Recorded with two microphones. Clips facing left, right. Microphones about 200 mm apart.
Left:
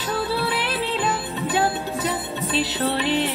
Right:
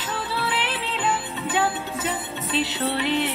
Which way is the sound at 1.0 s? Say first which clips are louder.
Left 1 dB; 40° left (ahead or behind).